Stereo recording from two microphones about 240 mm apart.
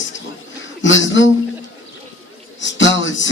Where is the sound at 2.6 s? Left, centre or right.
Left.